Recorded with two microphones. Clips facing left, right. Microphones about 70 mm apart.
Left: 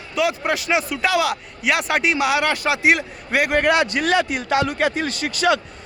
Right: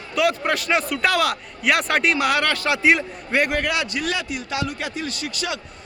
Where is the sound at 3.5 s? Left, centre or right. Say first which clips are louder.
Left 6 dB; left.